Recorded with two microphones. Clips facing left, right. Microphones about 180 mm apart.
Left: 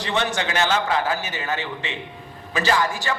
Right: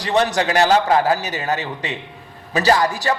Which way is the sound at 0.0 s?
40° right (ahead or behind).